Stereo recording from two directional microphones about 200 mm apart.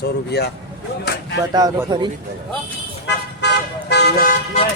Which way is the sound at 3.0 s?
60° left (ahead or behind).